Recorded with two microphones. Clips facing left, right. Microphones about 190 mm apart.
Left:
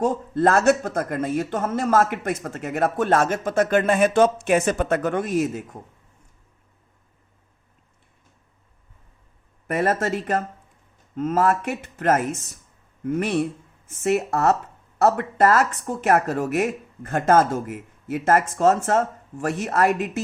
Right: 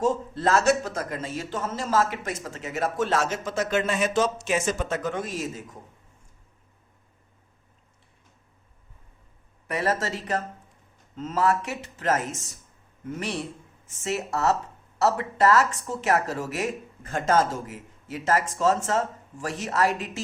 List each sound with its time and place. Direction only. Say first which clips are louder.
0.0 s speech: left 4 dB; 55° left (ahead or behind)
9.6 s speech: left 5 dB; 50° left (ahead or behind)